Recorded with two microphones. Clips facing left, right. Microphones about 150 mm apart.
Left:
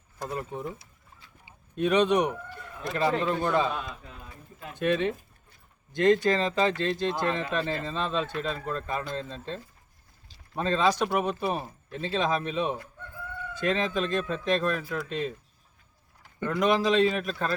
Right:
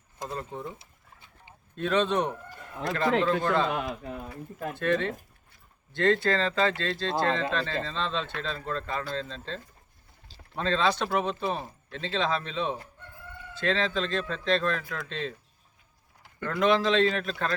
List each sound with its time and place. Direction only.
0.3 s speech: 15° left (ahead or behind)
3.4 s speech: 10° left (ahead or behind)
3.7 s speech: 65° right (ahead or behind)
4.7 s speech: 15° left (ahead or behind)
10.6 s speech: 15° left (ahead or behind)
16.4 s speech: 15° left (ahead or behind)